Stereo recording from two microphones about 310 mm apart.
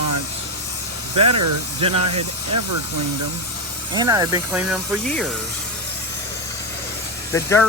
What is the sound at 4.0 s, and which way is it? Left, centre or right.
Speech, centre.